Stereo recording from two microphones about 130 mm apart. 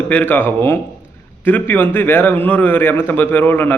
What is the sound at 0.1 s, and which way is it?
Speech, 15° left (ahead or behind).